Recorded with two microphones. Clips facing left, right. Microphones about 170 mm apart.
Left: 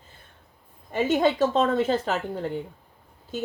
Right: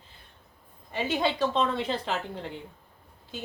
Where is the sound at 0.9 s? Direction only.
45° left (ahead or behind).